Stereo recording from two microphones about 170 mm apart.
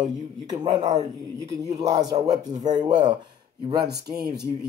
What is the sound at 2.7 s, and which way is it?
Speech, 45° right (ahead or behind).